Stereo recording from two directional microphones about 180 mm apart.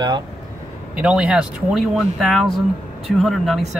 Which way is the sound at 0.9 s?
5° right (ahead or behind).